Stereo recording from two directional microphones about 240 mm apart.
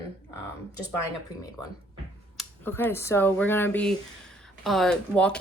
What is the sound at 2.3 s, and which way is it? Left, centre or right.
Speech, centre.